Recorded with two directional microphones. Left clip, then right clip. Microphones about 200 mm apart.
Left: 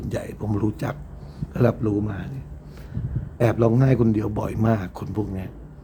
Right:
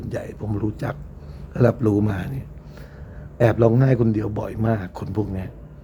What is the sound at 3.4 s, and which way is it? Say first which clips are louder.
A man's voice: right 3 dB; 10° right (ahead or behind).